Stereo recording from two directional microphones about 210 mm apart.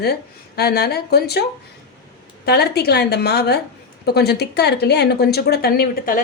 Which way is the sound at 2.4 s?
50° left (ahead or behind).